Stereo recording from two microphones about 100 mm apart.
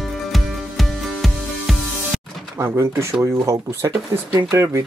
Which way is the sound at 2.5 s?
25° right (ahead or behind).